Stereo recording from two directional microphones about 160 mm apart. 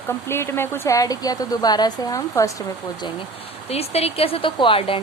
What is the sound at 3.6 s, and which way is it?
Speech, 40° left (ahead or behind).